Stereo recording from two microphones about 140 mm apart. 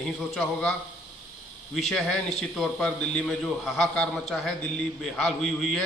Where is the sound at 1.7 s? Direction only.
Centre (ahead or behind).